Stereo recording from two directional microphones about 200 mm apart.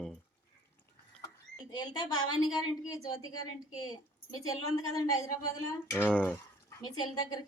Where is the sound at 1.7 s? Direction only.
20° left (ahead or behind).